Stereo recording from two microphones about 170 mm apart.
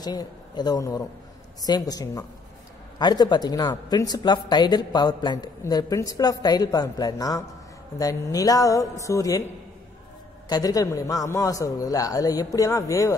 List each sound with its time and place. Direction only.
0.0 s speech: 25° left (ahead or behind)
10.5 s speech: 20° left (ahead or behind)